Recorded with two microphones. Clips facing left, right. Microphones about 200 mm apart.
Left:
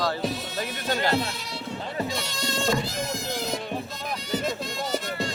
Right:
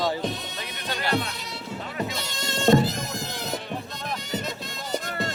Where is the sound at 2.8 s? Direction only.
Centre (ahead or behind).